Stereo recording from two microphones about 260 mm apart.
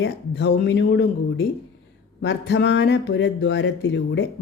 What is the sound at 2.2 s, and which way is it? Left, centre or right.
Speech, left.